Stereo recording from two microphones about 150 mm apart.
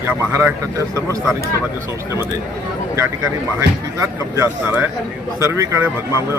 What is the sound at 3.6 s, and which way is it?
Speech, 20° right (ahead or behind).